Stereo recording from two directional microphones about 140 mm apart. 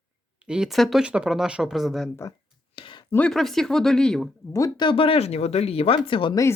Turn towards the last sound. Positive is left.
turn(degrees=40)  # may be behind; listen again after turning